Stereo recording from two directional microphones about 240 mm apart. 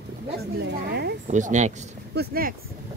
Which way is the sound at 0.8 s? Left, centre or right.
Right.